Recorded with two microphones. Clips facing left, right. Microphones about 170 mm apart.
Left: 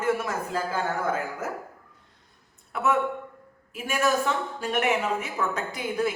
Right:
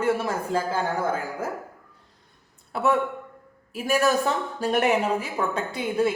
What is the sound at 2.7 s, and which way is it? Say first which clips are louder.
Speech: right 2 dB; 35° right (ahead or behind).